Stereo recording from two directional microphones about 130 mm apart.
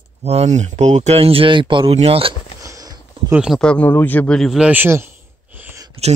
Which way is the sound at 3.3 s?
5° right (ahead or behind).